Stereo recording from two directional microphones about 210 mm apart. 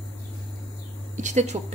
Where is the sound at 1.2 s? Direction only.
35° right (ahead or behind).